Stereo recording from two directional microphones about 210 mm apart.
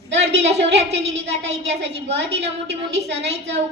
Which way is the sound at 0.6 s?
55° right (ahead or behind).